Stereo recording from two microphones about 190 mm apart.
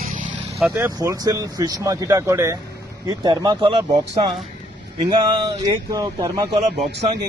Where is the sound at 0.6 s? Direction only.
10° right (ahead or behind).